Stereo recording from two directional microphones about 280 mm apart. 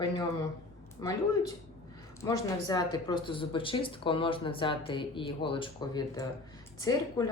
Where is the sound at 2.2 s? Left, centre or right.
Centre.